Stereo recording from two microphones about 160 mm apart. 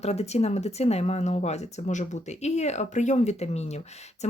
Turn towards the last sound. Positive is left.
turn(degrees=45)  # may be behind; listen again after turning